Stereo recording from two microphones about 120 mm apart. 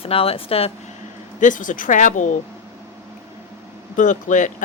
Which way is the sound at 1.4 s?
90° left.